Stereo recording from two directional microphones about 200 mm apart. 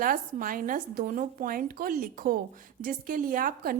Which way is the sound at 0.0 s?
45° right (ahead or behind).